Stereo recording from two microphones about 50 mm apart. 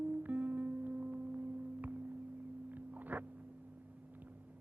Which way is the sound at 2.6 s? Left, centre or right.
Right.